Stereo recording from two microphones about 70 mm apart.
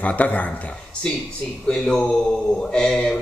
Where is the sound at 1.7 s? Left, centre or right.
Centre.